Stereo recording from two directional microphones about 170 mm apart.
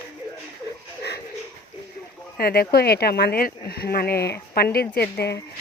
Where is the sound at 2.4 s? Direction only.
65° left (ahead or behind).